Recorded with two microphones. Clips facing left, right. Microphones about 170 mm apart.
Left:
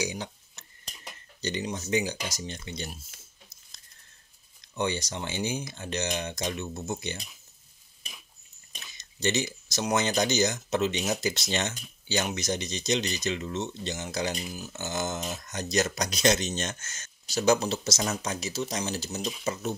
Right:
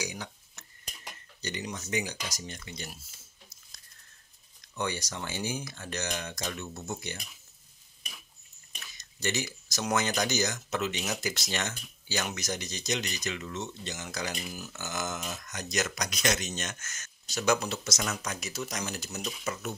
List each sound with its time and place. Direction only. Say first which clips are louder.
0.0 s cutlery: left 5 dB; 25° left (ahead or behind)
1.4 s speech: left 5 dB; 25° left (ahead or behind)
4.7 s speech: left 4 dB; 25° left (ahead or behind)
8.7 s speech: left 2 dB; 25° left (ahead or behind)